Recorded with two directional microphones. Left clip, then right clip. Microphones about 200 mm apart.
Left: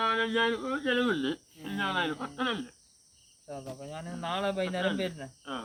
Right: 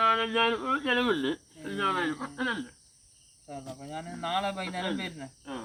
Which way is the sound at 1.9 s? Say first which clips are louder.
Right 1 dB; 5° left (ahead or behind).